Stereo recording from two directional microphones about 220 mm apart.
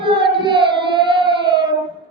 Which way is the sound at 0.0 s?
20° right (ahead or behind).